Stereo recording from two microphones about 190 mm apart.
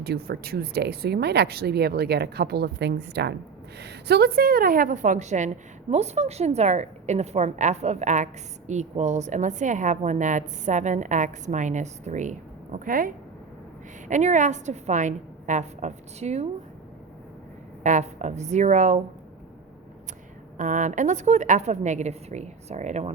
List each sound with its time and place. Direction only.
0.0 s a woman's voice: 55° right (ahead or behind)
14.1 s a woman's voice: 40° right (ahead or behind)
17.8 s a woman's voice: 40° right (ahead or behind)
20.6 s a woman's voice: 40° right (ahead or behind)